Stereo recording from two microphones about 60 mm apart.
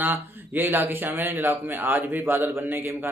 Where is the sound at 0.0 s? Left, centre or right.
Right.